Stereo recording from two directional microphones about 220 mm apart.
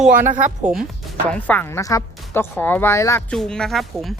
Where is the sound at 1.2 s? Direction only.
5° left (ahead or behind).